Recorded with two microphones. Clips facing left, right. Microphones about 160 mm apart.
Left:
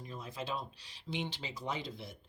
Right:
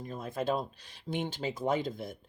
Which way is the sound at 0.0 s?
50° right (ahead or behind).